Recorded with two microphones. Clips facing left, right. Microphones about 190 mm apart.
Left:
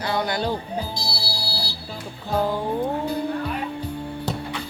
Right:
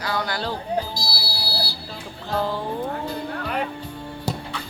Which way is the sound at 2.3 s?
10° left (ahead or behind).